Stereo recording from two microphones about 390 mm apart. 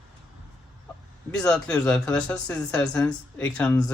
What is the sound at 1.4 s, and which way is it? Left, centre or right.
Speech, centre.